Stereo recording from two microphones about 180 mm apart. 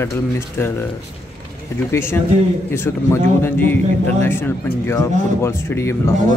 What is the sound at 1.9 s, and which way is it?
Speech, 15° left (ahead or behind).